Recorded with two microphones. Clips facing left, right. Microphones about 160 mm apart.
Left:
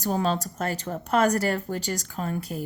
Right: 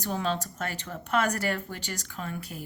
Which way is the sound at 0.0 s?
40° left (ahead or behind).